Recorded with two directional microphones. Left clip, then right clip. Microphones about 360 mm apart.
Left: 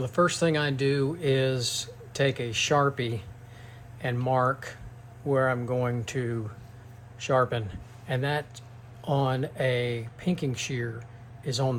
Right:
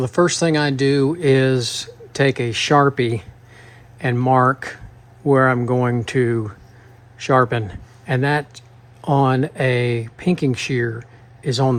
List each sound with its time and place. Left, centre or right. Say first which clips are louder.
0.0 s a man's voice: right 7 dB; centre